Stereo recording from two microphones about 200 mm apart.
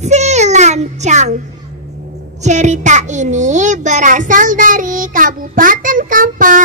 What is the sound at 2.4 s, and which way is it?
A child's voice, 35° right (ahead or behind).